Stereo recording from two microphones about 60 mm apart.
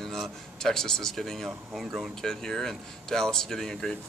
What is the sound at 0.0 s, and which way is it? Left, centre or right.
Speech, centre.